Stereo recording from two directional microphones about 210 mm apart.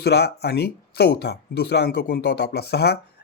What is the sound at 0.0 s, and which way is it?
Speech, 50° left (ahead or behind).